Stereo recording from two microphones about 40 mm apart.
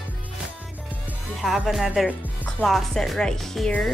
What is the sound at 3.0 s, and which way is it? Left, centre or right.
Speech, centre.